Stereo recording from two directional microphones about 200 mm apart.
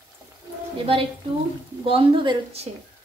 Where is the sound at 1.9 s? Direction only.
25° right (ahead or behind).